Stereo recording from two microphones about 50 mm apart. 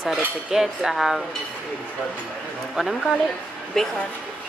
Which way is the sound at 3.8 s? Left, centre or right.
Centre.